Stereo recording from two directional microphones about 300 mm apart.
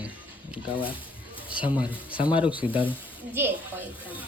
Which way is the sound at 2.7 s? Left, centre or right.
Centre.